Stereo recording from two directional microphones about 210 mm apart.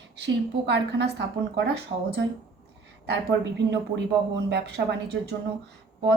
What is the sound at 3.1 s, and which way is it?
A woman's voice, 55° right (ahead or behind).